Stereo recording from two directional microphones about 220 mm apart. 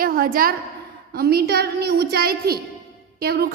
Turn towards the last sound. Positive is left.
turn(degrees=-45)  # may be behind; listen again after turning